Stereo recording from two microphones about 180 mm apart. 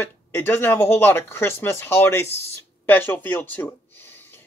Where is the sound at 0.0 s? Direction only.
10° left (ahead or behind).